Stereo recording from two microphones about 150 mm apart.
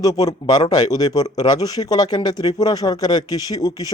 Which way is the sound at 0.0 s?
25° left (ahead or behind).